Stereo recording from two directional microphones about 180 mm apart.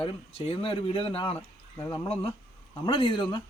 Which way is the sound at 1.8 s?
20° left (ahead or behind).